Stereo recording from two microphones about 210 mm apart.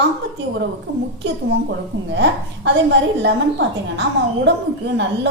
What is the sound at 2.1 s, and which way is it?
Speech, 55° right (ahead or behind).